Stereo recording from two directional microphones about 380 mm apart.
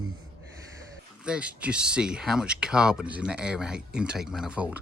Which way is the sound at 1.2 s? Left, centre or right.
Centre.